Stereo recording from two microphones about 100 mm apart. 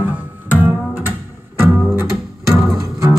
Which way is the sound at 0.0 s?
20° right (ahead or behind).